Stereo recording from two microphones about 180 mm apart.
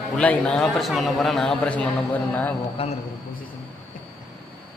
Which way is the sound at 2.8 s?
30° left (ahead or behind).